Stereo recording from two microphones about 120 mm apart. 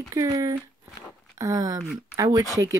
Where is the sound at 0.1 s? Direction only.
25° right (ahead or behind).